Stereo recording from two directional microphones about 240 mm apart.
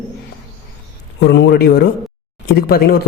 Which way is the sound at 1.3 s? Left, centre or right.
Left.